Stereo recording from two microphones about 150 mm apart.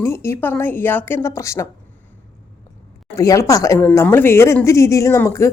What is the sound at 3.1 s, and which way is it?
A woman's voice, 20° left (ahead or behind).